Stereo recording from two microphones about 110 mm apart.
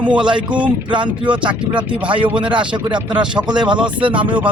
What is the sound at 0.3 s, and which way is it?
Speech, 45° right (ahead or behind).